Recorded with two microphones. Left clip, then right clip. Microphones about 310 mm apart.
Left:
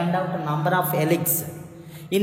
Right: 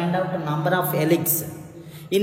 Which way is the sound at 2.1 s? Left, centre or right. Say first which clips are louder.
Right 2 dB; centre.